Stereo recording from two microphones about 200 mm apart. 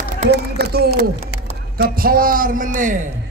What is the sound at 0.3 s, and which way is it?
A man's voice, 50° right (ahead or behind).